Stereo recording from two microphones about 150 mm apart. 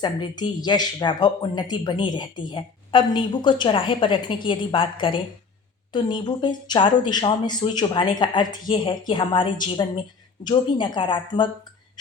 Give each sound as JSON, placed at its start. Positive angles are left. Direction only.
{"t": 0.0, "sound": "speech", "side_deg": 30}